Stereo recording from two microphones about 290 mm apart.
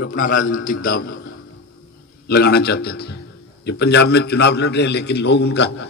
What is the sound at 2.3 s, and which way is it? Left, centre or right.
A man's voice, left.